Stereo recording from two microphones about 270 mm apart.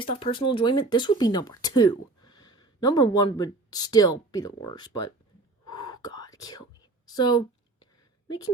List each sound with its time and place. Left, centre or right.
0.0 s speech: centre
5.7 s whispering: centre
7.1 s a sound: centre